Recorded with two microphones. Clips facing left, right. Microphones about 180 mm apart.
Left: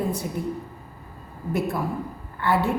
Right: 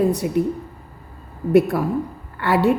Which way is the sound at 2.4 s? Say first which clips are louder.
Right 5 dB; 75° right (ahead or behind).